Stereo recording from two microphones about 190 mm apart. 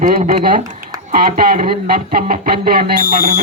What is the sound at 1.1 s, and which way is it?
Speech, 50° right (ahead or behind).